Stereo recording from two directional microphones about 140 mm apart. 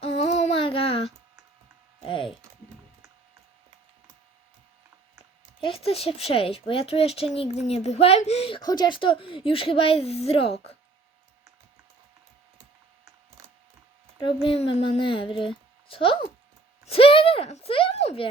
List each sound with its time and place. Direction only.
0.0 s a sound: 50° left (ahead or behind)
5.5 s speech: 40° left (ahead or behind)
14.4 s a woman's voice: 45° left (ahead or behind)